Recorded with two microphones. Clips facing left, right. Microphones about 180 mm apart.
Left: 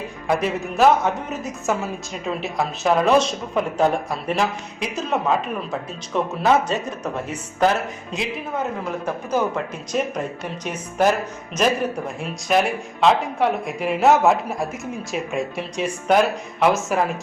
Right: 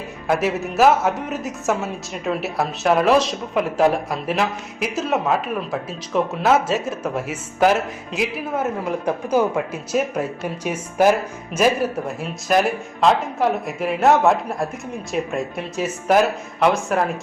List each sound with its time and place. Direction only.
0.3 s a woman's voice: 5° right (ahead or behind)